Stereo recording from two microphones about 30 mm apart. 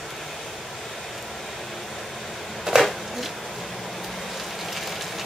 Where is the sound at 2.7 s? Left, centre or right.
Right.